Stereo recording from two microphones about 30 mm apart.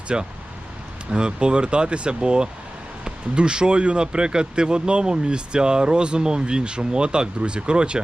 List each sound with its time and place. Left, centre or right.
0.1 s speech: right